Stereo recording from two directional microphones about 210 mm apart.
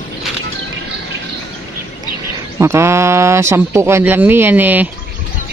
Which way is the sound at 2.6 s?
15° right (ahead or behind).